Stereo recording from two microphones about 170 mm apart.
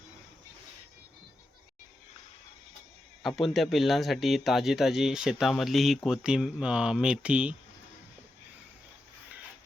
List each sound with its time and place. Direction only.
3.2 s speech: centre (ahead or behind)